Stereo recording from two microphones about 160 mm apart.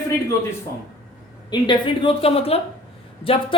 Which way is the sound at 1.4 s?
25° left (ahead or behind).